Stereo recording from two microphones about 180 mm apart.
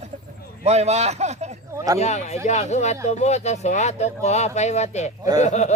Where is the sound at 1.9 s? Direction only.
40° left (ahead or behind).